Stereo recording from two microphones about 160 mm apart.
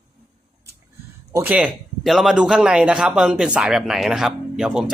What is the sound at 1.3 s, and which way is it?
Speech, 15° right (ahead or behind).